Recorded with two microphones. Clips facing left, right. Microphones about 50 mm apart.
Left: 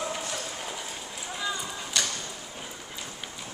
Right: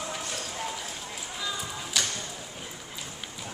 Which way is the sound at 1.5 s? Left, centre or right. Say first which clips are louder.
Even; centre.